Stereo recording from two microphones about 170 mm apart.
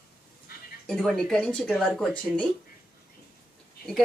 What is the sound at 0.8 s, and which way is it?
Speech, centre (ahead or behind).